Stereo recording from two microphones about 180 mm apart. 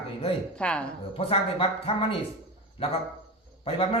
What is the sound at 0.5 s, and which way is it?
Speech, 5° left (ahead or behind).